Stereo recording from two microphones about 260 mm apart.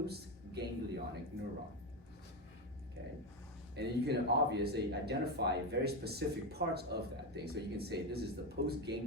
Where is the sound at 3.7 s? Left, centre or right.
Right.